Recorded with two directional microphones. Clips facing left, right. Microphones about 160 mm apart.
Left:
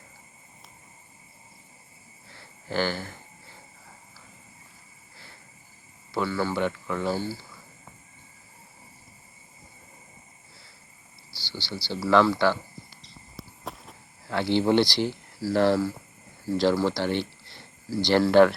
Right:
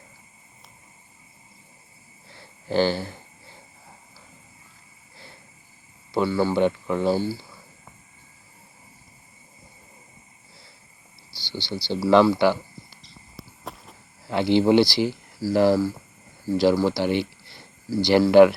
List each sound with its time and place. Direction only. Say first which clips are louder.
2.6 s speech: right 6 dB; 20° right (ahead or behind)
6.1 s speech: right 5 dB; 15° right (ahead or behind)
11.5 s speech: right 5 dB; 20° right (ahead or behind)
13.0 s a sound: even; centre (ahead or behind)
14.3 s speech: right 4 dB; 15° right (ahead or behind)